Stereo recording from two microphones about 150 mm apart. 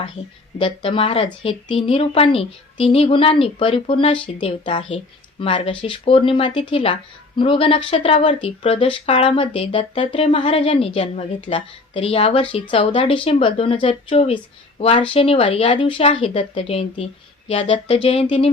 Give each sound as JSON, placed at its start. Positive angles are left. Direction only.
{"t": 0.6, "sound": "speech", "side_deg": 35}